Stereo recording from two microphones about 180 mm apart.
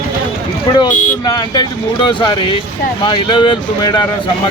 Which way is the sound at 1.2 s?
20° left (ahead or behind).